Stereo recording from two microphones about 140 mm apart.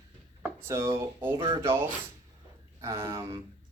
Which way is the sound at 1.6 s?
15° right (ahead or behind).